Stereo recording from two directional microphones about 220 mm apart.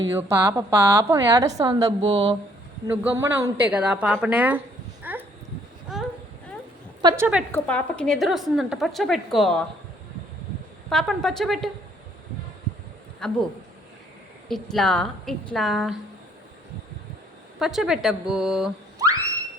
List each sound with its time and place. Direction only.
0.1 s a woman's voice: 10° right (ahead or behind)
5.0 s a sound: 10° right (ahead or behind)
7.0 s a woman's voice: 20° right (ahead or behind)
7.5 s a woman's voice: 5° left (ahead or behind)
10.8 s a woman's voice: centre (ahead or behind)
13.2 s a woman's voice: 5° left (ahead or behind)
14.4 s a woman's voice: centre (ahead or behind)
17.6 s a woman's voice: centre (ahead or behind)
18.9 s a sound: 15° right (ahead or behind)